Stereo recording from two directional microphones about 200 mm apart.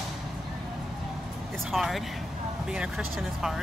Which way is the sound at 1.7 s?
Centre (ahead or behind).